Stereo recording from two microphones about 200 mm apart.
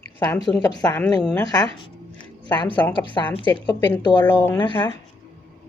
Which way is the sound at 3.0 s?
20° left (ahead or behind).